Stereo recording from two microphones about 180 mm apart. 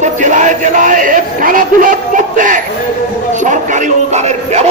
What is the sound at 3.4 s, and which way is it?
Music, 40° right (ahead or behind).